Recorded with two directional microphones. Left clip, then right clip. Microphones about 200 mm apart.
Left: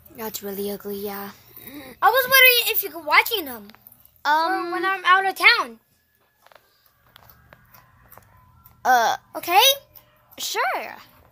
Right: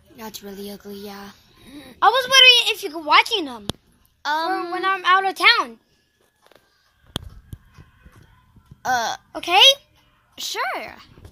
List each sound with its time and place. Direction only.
0.1 s speech: centre (ahead or behind)
2.0 s a woman's voice: 40° right (ahead or behind)
4.2 s child singing: 5° left (ahead or behind)
4.6 s a woman's voice: 50° right (ahead or behind)
5.0 s a woman's voice: 30° right (ahead or behind)
5.5 s a woman's voice: 45° right (ahead or behind)
8.8 s speech: 5° left (ahead or behind)
9.3 s a woman's voice: 25° right (ahead or behind)
10.3 s speech: centre (ahead or behind)
10.7 s speech: 15° right (ahead or behind)